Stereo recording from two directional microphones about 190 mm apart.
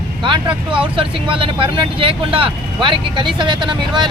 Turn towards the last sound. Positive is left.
turn(degrees=-25)  # may be behind; listen again after turning